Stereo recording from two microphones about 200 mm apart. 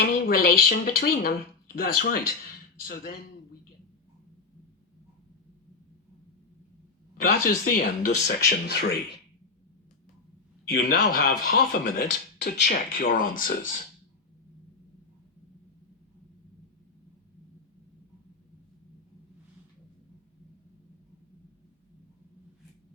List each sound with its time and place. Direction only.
0.0 s speech: 45° left (ahead or behind)
7.2 s speech: 45° left (ahead or behind)
8.4 s speech: 55° left (ahead or behind)
10.7 s speech: 50° left (ahead or behind)
12.7 s speech: 45° left (ahead or behind)